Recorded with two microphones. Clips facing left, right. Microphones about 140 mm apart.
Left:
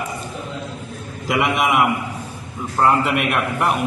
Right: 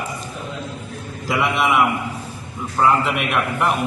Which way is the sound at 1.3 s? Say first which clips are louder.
Left 1 dB; 20° left (ahead or behind).